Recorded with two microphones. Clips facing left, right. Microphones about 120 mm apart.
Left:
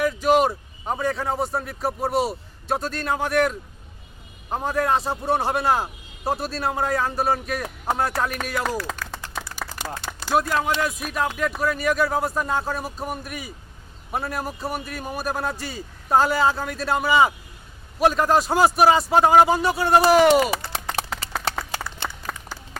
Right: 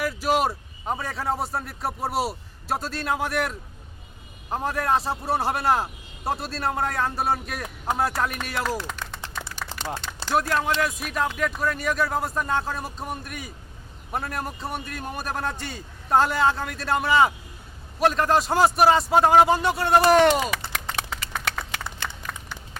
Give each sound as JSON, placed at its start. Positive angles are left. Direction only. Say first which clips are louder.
{"t": 0.0, "sound": "a man's voice", "louder": "left 4 dB", "side_deg": -5}
{"t": 10.2, "sound": "a man's voice", "louder": "left 2 dB", "side_deg": 5}
{"t": 20.7, "sound": "a sound", "louder": "left 2 dB", "side_deg": 30}
{"t": 22.0, "sound": "clapping", "louder": "left 3 dB", "side_deg": 35}